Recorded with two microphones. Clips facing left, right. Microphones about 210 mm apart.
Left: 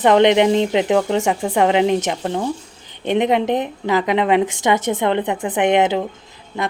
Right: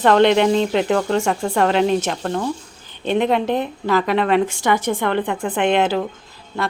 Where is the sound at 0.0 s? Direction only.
15° left (ahead or behind).